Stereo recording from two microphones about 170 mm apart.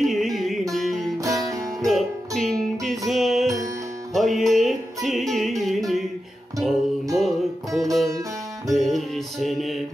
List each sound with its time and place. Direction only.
0.0 s music: centre (ahead or behind)
1.1 s music: 20° right (ahead or behind)
1.9 s music: centre (ahead or behind)